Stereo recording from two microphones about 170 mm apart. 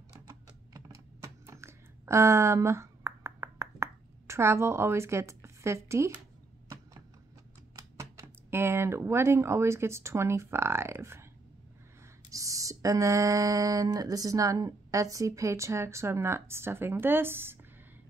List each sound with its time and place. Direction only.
0.3 s typing: 20° right (ahead or behind)
7.7 s speech: 15° right (ahead or behind)
12.3 s a sound: 20° right (ahead or behind)